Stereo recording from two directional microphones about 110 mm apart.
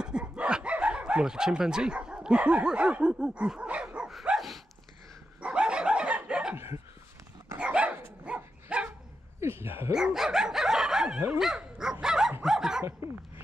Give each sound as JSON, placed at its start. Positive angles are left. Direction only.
{"t": 0.0, "sound": "dog", "side_deg": -10}
{"t": 6.5, "sound": "dog", "side_deg": -25}
{"t": 7.5, "sound": "dog", "side_deg": -10}
{"t": 9.4, "sound": "speech", "side_deg": -25}
{"t": 9.9, "sound": "dog", "side_deg": -5}